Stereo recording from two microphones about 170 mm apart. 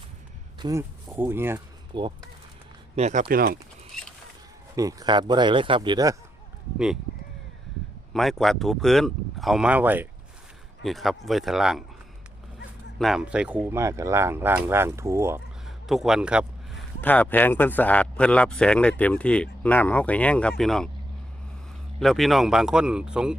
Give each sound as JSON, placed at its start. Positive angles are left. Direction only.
{"t": 0.6, "sound": "speech", "side_deg": -15}
{"t": 1.9, "sound": "speech", "side_deg": -30}
{"t": 2.9, "sound": "speech", "side_deg": -45}
{"t": 3.2, "sound": "speech", "side_deg": -60}
{"t": 4.7, "sound": "speech", "side_deg": -20}
{"t": 6.7, "sound": "speech", "side_deg": -5}
{"t": 8.1, "sound": "speech", "side_deg": 0}
{"t": 10.8, "sound": "speech", "side_deg": 0}
{"t": 13.0, "sound": "speech", "side_deg": 0}
{"t": 15.6, "sound": "a sound", "side_deg": 0}
{"t": 17.0, "sound": "speech", "side_deg": 10}
{"t": 22.0, "sound": "speech", "side_deg": 0}